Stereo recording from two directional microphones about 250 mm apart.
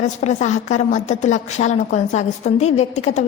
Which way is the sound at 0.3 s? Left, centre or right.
Left.